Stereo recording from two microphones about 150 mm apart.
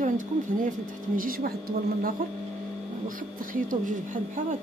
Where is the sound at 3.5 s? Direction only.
60° right (ahead or behind).